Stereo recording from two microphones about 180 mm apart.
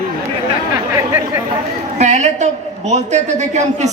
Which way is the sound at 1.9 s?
40° right (ahead or behind).